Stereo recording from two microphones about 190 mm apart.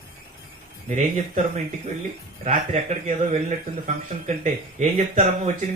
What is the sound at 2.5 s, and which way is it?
Speech, 35° right (ahead or behind).